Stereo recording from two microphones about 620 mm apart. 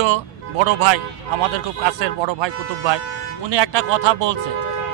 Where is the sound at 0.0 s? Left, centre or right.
Right.